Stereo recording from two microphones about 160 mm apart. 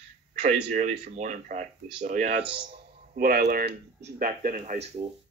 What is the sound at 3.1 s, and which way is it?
Speech, 70° right (ahead or behind).